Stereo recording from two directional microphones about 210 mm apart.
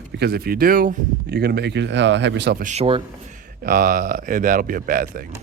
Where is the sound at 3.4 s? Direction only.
40° right (ahead or behind).